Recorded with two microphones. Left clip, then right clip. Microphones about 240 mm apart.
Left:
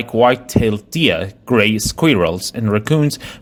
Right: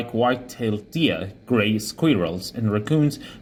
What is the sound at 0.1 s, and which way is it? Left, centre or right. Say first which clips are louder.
Speech: left 10 dB; left.